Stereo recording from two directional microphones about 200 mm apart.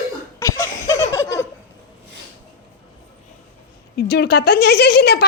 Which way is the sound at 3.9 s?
55° left (ahead or behind).